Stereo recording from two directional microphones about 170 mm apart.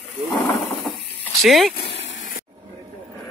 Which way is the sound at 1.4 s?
Centre (ahead or behind).